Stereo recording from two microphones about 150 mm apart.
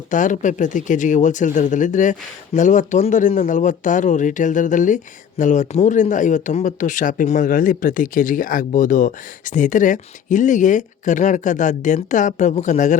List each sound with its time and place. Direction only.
0.1 s speech: 60° left (ahead or behind)